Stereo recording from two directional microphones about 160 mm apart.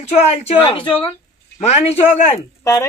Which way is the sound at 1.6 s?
45° left (ahead or behind).